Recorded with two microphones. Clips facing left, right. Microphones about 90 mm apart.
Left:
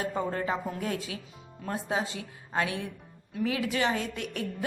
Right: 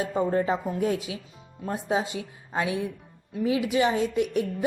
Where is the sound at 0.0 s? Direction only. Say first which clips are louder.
Right 6 dB; 15° right (ahead or behind).